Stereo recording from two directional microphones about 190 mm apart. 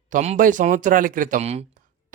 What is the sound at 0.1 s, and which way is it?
Speech, 40° right (ahead or behind).